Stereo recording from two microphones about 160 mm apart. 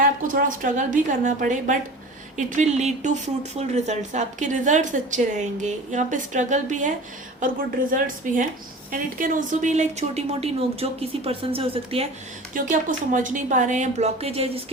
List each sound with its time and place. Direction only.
0.0 s a woman's voice: 60° right (ahead or behind); by 12.0 s 35° right (ahead or behind)
12.5 s speech: 55° right (ahead or behind); by 14.6 s 40° right (ahead or behind)